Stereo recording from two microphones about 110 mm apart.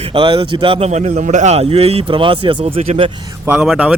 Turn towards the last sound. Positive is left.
turn(degrees=-10)  # may be behind; listen again after turning